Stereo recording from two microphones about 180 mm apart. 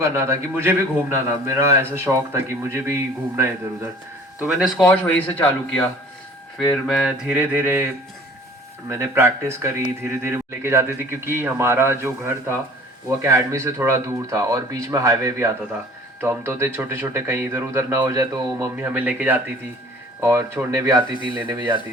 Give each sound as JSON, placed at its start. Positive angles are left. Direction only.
{"t": 0.0, "sound": "a man's voice", "side_deg": -15}
{"t": 8.9, "sound": "a man's voice", "side_deg": -15}